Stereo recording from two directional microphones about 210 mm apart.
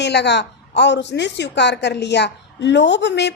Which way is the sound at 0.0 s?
55° left (ahead or behind).